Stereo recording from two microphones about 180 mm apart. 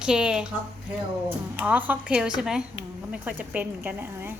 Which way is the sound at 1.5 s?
10° right (ahead or behind).